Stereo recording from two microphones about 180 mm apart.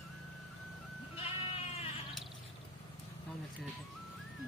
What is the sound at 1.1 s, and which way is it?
Sheep, 35° left (ahead or behind).